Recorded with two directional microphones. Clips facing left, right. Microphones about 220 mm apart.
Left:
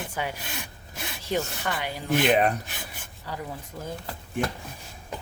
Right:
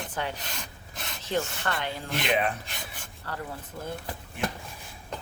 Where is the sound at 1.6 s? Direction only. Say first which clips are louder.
Left 1 dB; 10° left (ahead or behind).